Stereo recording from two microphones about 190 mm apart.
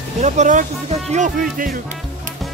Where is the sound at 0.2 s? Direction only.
40° right (ahead or behind).